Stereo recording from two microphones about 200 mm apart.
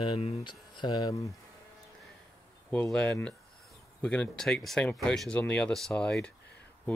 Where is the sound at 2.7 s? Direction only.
5° left (ahead or behind).